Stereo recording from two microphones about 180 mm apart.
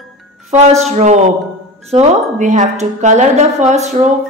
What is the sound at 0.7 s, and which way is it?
Speech, 35° right (ahead or behind).